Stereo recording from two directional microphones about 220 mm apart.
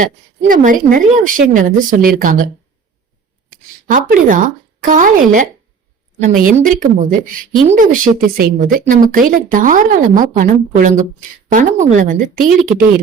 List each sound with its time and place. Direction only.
0.0 s speech: 35° right (ahead or behind)
3.8 s speech: 40° right (ahead or behind)